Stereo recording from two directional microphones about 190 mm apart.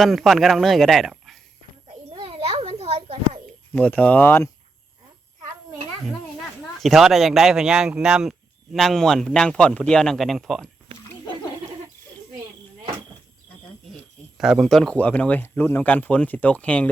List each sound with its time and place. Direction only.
0.0 s speech: centre (ahead or behind)
2.0 s a sound: 30° right (ahead or behind)
3.7 s speech: 5° left (ahead or behind)
6.8 s speech: centre (ahead or behind)
14.3 s speech: centre (ahead or behind)